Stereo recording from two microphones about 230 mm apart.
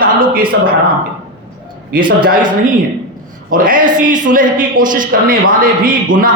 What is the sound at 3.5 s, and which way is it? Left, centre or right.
A man's voice, right.